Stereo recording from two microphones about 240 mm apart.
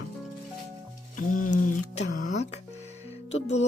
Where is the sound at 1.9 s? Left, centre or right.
Left.